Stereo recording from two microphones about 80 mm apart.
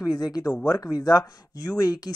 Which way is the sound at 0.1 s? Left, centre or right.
Left.